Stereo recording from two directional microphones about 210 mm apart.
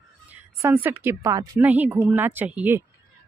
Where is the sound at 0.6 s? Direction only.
10° right (ahead or behind).